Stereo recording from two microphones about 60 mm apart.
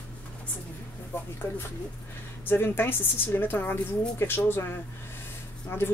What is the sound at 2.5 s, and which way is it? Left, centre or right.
A woman's voice, left.